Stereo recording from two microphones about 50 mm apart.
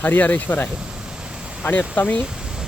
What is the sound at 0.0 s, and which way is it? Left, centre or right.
Speech, left.